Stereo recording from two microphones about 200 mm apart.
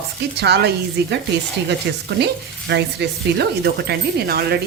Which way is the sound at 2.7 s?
55° right (ahead or behind).